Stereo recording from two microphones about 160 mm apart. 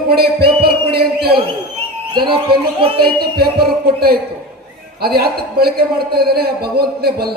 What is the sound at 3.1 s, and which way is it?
A man's voice, 75° right (ahead or behind).